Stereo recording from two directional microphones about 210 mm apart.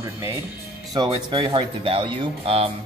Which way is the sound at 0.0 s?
10° right (ahead or behind).